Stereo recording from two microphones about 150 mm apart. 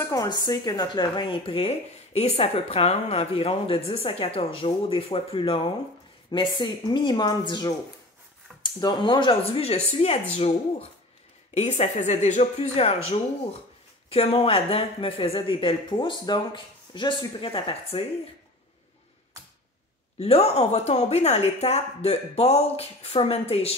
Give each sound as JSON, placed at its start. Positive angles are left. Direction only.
{"t": 0.1, "sound": "speech", "side_deg": 25}
{"t": 20.2, "sound": "speech", "side_deg": 45}